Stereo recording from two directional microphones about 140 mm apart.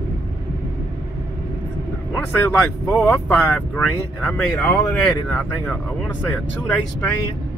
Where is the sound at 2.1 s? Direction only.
15° left (ahead or behind).